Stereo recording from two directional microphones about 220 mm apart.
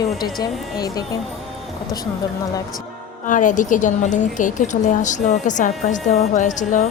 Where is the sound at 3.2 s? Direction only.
35° left (ahead or behind).